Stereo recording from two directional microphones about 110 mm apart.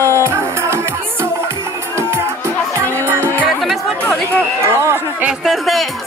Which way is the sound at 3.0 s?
20° right (ahead or behind).